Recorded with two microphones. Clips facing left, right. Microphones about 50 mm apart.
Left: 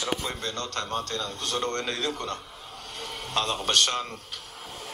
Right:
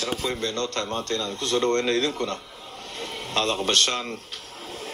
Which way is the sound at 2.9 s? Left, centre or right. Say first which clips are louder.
Right 2 dB; right.